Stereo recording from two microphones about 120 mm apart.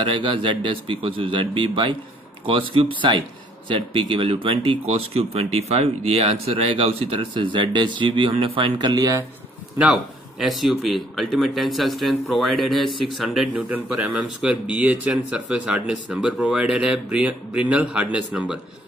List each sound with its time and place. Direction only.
0.0 s speech: 45° right (ahead or behind)
10.4 s speech: centre (ahead or behind)